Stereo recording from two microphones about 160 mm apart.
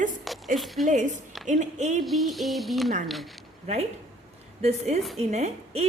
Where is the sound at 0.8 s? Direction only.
50° right (ahead or behind).